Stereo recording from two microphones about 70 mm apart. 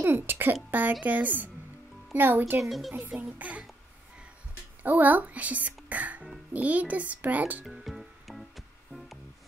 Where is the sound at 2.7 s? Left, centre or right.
Centre.